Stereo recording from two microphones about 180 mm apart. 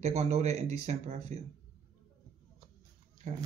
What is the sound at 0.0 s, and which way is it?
Speech, 35° right (ahead or behind).